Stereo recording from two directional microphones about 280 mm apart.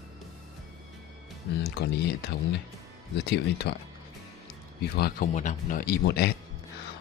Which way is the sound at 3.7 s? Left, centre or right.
Left.